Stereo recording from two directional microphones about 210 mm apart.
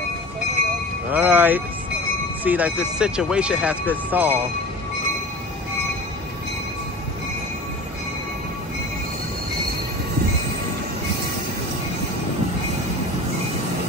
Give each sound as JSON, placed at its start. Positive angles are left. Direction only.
{"t": 1.1, "sound": "speech", "side_deg": -10}